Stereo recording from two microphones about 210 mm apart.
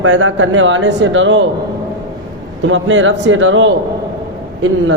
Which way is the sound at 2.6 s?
65° right (ahead or behind).